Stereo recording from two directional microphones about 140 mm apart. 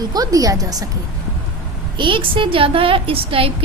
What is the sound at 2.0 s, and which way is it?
A woman's voice, 35° right (ahead or behind).